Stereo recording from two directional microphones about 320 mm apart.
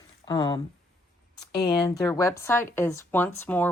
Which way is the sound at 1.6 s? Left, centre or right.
Centre.